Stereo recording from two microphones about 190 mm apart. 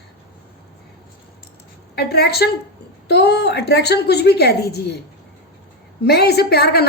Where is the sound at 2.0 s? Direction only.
60° left (ahead or behind).